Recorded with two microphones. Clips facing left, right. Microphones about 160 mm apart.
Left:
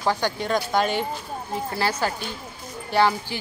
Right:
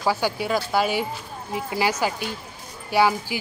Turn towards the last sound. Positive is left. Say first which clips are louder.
# right 1 dB
turn(degrees=-10)  # may be behind; listen again after turning